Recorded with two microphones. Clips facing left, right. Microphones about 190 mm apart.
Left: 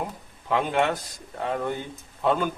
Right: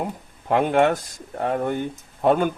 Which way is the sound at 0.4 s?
50° right (ahead or behind).